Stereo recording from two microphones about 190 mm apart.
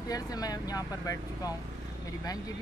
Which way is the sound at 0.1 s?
20° left (ahead or behind).